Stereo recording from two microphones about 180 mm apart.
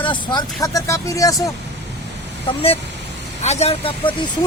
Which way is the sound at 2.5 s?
30° left (ahead or behind).